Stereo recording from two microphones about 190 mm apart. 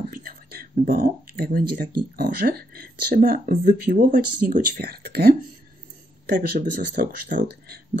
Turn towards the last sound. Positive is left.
turn(degrees=-55)  # may be behind; listen again after turning